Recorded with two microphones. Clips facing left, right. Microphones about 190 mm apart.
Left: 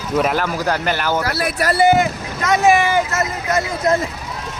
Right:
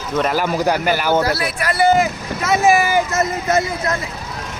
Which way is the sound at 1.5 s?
40° left (ahead or behind).